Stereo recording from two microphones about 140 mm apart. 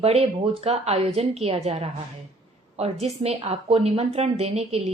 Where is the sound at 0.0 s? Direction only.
45° right (ahead or behind).